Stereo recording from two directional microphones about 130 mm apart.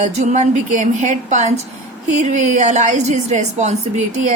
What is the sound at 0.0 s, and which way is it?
A woman's voice, 65° right (ahead or behind).